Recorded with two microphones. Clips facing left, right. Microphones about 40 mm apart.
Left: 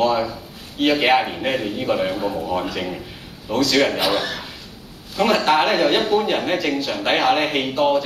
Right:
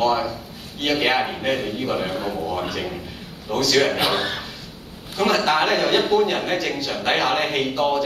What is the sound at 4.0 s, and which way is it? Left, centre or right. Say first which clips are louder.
Speech: left 1 dB; right.